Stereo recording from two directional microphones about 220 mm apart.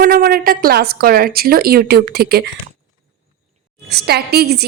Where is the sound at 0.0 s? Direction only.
40° right (ahead or behind).